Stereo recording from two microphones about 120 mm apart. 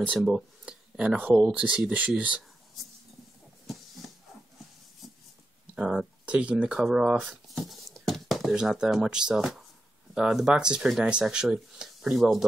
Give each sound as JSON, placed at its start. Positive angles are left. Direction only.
{"t": 0.1, "sound": "speech", "side_deg": -10}
{"t": 5.8, "sound": "speech", "side_deg": -5}